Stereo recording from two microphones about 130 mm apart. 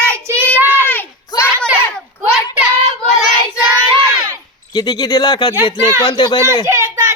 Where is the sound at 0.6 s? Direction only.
15° right (ahead or behind).